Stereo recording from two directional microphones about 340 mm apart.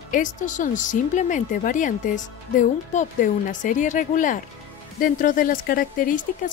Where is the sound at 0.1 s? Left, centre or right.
Left.